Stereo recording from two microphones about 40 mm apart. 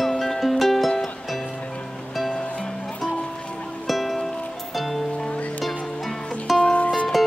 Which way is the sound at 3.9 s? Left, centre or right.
Centre.